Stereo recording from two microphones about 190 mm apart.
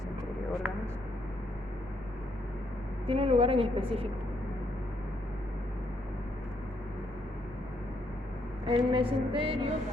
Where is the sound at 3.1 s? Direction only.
30° right (ahead or behind).